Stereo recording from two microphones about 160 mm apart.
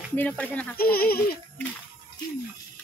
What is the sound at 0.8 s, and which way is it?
Speech, 70° left (ahead or behind).